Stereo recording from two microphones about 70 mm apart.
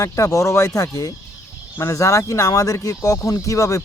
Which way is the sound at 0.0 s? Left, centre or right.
Left.